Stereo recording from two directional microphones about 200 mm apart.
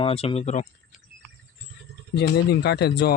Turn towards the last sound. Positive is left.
turn(degrees=55)  # may be behind; listen again after turning